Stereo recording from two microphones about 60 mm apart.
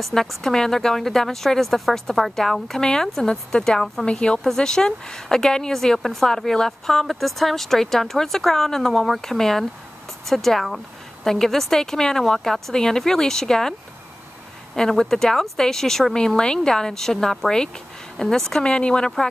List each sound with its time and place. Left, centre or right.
0.0 s a woman's voice: centre
4.0 s a woman's voice: centre
14.8 s speech: centre